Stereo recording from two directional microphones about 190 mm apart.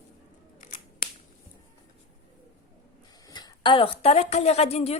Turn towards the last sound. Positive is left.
turn(degrees=35)  # may be behind; listen again after turning